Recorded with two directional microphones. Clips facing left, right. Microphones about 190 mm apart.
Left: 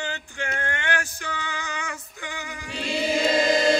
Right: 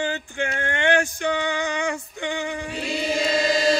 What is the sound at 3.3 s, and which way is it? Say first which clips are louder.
Choir: even; 55° left (ahead or behind).